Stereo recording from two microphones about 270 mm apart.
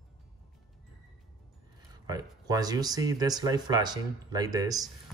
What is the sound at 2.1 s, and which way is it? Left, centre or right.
Speech, centre.